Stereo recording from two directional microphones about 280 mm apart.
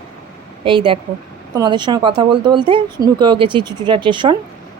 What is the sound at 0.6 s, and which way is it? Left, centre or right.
A woman's voice, centre.